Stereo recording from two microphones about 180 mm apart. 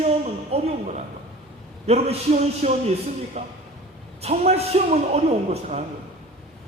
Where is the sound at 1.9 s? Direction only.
35° right (ahead or behind).